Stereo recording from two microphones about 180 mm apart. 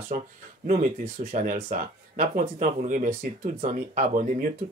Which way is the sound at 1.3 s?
45° right (ahead or behind).